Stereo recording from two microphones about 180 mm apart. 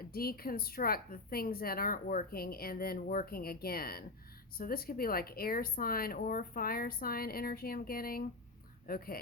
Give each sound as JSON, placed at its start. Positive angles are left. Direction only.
{"t": 0.1, "sound": "speech", "side_deg": 55}